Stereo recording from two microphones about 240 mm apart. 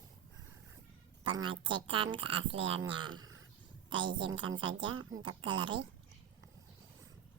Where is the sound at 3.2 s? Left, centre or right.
Right.